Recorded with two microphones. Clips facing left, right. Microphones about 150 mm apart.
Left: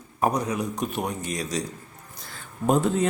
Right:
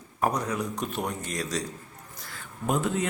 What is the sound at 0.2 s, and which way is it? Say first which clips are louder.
A man's voice: left 3 dB; 15° left (ahead or behind).